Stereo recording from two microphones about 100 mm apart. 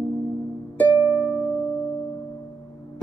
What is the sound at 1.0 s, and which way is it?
Music, 5° right (ahead or behind).